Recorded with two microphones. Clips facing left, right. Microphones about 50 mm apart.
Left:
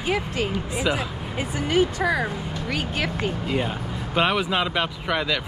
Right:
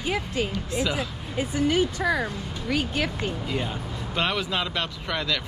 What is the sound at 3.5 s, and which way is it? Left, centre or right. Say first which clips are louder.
Speech: left 4 dB; centre.